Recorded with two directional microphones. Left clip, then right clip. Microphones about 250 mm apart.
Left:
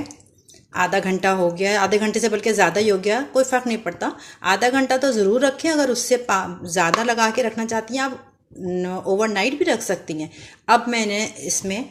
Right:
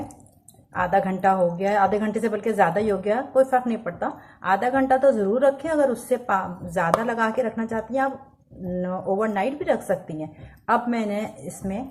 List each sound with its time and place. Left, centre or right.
0.7 s speech: left